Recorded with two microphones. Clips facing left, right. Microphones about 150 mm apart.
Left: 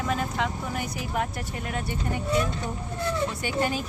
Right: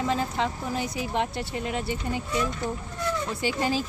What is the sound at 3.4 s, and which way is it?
Speech, 25° right (ahead or behind).